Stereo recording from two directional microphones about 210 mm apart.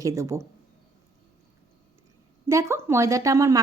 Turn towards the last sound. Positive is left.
turn(degrees=-15)  # may be behind; listen again after turning